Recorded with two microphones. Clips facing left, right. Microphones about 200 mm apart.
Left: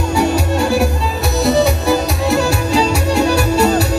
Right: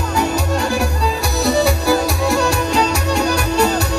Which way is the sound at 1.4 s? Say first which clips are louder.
Left 2 dB; centre (ahead or behind).